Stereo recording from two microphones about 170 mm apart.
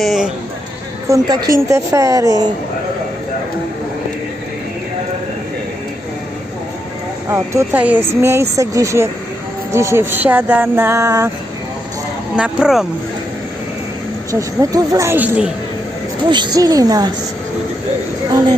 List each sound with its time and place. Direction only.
0.0 s speech: centre (ahead or behind)
1.1 s speech: 20° right (ahead or behind)
7.3 s speech: 15° right (ahead or behind)
12.4 s speech: 5° right (ahead or behind)
14.3 s speech: 20° right (ahead or behind)
16.3 s speech: 25° right (ahead or behind)